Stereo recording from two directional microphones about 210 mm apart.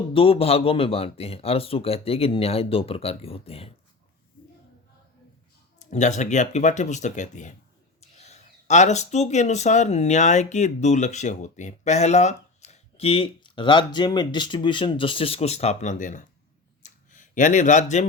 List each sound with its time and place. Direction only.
0.1 s speech: 25° left (ahead or behind)
5.8 s speech: 35° left (ahead or behind)
16.8 s a sound: 35° left (ahead or behind)